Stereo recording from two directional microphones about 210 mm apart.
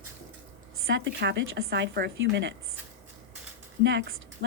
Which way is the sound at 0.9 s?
55° right (ahead or behind).